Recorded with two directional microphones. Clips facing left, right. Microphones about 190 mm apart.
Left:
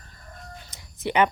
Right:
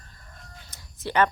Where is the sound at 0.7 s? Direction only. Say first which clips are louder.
Left 4 dB; 15° left (ahead or behind).